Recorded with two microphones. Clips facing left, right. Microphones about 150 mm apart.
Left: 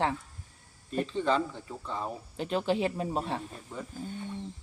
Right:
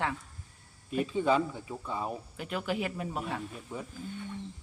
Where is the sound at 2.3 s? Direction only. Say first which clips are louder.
Left 7 dB; 30° left (ahead or behind).